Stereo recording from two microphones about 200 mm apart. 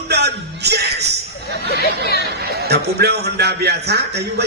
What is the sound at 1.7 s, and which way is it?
Speech, 55° left (ahead or behind).